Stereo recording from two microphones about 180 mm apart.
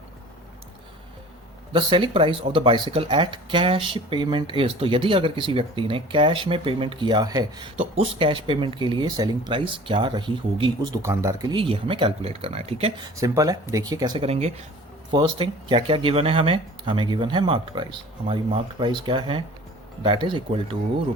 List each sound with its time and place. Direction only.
1.7 s speech: 25° right (ahead or behind)
13.1 s speech: 20° right (ahead or behind)
14.3 s speech: 35° right (ahead or behind)
15.1 s speech: 25° right (ahead or behind)